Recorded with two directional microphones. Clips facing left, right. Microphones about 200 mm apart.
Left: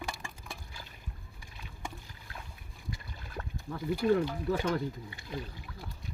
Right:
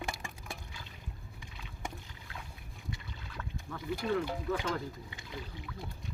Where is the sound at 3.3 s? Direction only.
35° left (ahead or behind).